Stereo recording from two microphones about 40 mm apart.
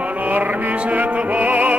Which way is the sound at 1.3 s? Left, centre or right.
Right.